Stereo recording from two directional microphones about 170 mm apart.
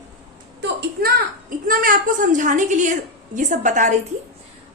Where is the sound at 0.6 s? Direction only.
75° right (ahead or behind).